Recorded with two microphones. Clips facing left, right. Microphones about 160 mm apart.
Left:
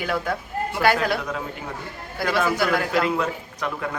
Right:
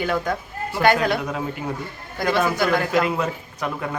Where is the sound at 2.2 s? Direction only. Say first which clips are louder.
Right 3 dB; 5° left (ahead or behind).